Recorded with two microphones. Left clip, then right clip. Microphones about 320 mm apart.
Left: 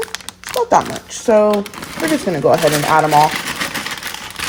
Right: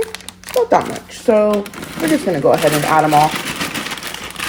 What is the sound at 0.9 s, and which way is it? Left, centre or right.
Speech, left.